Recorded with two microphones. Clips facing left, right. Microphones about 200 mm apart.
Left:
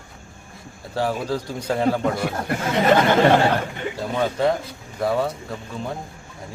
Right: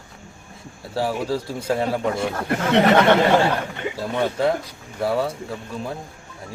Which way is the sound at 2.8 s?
65° right (ahead or behind).